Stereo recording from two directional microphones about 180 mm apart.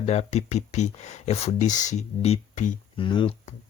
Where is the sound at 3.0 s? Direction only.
30° left (ahead or behind).